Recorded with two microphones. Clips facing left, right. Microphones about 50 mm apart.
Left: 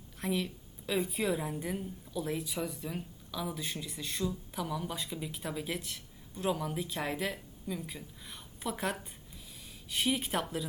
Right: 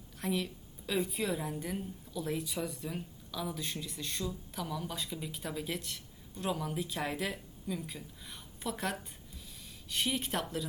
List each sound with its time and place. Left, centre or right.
0.2 s speech: centre